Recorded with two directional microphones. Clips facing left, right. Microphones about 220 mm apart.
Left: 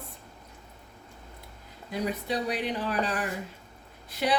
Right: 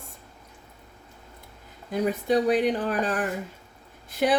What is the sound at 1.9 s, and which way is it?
A woman's voice, 50° right (ahead or behind).